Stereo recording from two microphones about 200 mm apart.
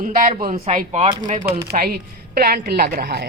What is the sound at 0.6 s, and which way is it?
Speech, 35° right (ahead or behind).